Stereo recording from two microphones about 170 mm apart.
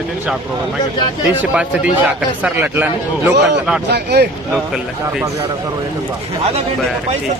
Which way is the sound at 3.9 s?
75° right (ahead or behind).